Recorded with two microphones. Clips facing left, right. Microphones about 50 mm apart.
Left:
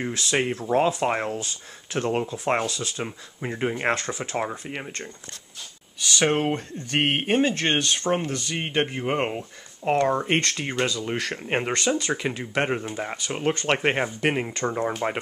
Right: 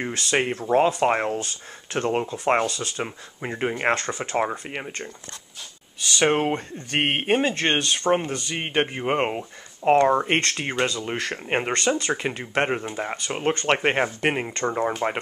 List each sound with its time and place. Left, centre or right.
0.3 s speech: centre
3.9 s speech: centre
4.4 s speech: centre
6.1 s speech: centre